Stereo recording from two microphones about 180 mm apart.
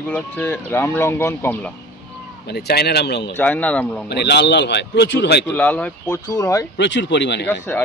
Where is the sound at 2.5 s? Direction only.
65° left (ahead or behind).